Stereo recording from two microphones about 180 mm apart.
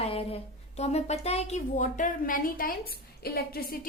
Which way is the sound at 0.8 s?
40° left (ahead or behind).